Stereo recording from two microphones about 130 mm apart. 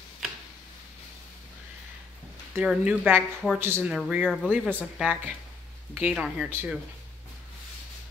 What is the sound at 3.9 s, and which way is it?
Speech, 10° right (ahead or behind).